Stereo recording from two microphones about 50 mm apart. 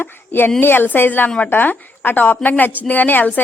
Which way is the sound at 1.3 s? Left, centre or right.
Left.